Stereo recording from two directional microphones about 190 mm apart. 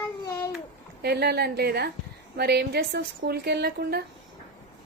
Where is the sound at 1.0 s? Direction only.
60° right (ahead or behind).